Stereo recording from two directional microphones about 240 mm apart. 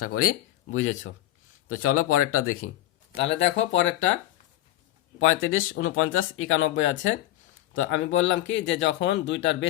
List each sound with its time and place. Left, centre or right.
0.0 s speech: left
3.4 s speech: left
5.2 s speech: left